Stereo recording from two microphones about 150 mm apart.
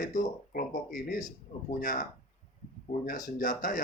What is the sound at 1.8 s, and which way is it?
Speech, 60° left (ahead or behind).